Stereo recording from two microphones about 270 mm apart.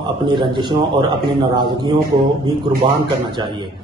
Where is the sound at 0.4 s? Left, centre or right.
Centre.